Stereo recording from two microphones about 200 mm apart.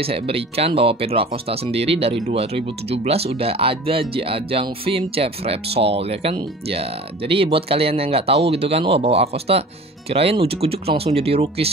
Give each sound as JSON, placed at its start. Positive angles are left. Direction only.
{"t": 0.0, "sound": "speech", "side_deg": -30}